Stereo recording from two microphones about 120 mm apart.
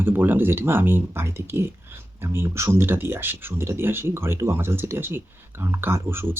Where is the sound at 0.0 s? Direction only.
15° right (ahead or behind).